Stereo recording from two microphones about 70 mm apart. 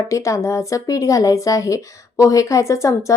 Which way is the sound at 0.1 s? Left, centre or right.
Left.